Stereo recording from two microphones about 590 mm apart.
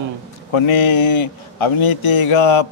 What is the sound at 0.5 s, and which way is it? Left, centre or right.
A man's voice, left.